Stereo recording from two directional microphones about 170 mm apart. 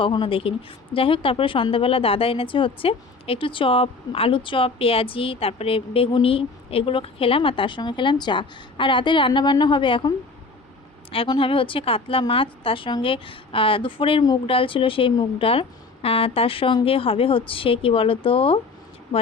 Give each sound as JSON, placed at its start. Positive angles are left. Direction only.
{"t": 0.0, "sound": "speech", "side_deg": 30}
{"t": 11.1, "sound": "speech", "side_deg": 30}